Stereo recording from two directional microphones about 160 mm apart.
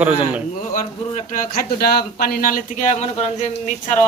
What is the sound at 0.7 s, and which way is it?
A man's voice, 55° left (ahead or behind).